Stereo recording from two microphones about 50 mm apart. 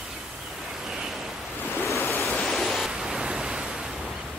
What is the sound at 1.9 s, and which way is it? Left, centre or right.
Waves, left.